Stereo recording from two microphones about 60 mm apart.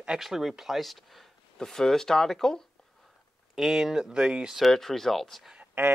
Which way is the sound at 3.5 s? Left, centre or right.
Centre.